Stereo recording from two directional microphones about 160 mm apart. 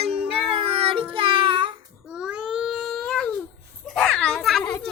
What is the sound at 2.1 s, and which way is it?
Baby cry, 5° right (ahead or behind).